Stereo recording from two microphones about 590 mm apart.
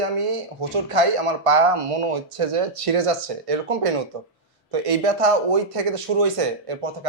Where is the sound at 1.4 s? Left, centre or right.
Right.